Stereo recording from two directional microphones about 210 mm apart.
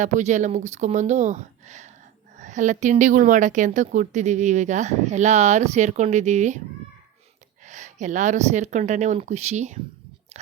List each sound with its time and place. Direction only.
0.0 s a woman's voice: 35° right (ahead or behind)
7.6 s a woman's voice: 35° right (ahead or behind)